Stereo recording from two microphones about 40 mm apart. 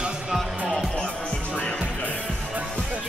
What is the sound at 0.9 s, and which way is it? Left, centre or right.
Music, left.